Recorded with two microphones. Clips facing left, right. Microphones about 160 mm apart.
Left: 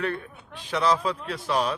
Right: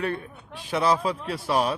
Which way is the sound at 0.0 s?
10° right (ahead or behind).